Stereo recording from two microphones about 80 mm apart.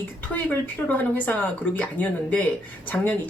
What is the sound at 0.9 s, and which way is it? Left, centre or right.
Speech, left.